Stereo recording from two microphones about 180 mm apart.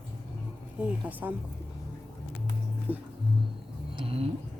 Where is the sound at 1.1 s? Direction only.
10° right (ahead or behind).